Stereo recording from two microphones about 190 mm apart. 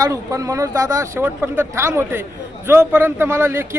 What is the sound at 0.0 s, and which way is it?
Speech, 15° right (ahead or behind).